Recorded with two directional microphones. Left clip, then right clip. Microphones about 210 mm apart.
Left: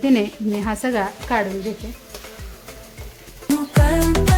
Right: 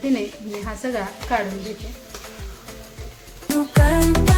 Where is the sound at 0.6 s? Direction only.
50° left (ahead or behind).